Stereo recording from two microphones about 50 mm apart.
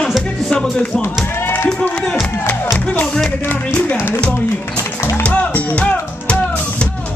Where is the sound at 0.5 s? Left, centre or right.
Centre.